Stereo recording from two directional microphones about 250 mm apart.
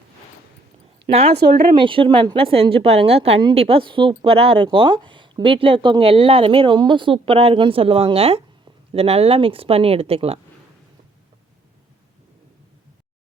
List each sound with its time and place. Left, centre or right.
1.1 s a woman's voice: right